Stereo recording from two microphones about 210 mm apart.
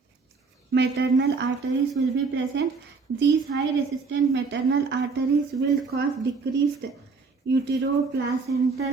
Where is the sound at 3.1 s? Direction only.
55° right (ahead or behind).